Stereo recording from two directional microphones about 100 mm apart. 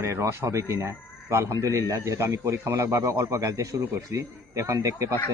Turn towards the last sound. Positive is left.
turn(degrees=-35)  # may be behind; listen again after turning